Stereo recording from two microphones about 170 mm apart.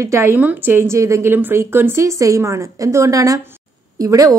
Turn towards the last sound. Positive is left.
turn(degrees=-20)  # may be behind; listen again after turning